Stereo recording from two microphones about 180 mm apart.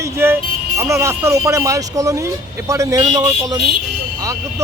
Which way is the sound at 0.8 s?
15° right (ahead or behind).